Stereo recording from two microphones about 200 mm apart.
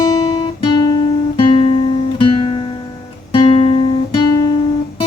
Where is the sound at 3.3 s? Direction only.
30° left (ahead or behind).